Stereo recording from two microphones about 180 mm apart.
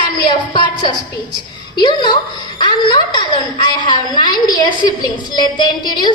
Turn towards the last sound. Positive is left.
turn(degrees=25)  # may be behind; listen again after turning